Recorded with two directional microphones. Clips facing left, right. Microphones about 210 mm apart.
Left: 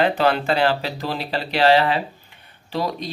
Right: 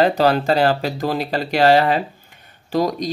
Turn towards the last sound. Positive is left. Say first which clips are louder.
# right 6 dB
turn(degrees=-45)  # may be behind; listen again after turning